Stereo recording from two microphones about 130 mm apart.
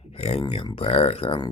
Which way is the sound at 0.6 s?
45° left (ahead or behind).